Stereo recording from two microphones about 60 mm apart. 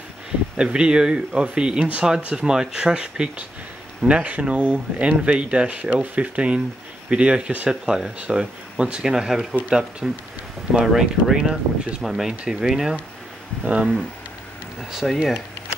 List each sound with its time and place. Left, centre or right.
0.6 s speech: centre
9.1 s speech: centre
14.9 s speech: centre